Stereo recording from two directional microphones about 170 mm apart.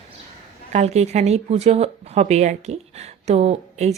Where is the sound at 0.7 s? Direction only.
40° right (ahead or behind).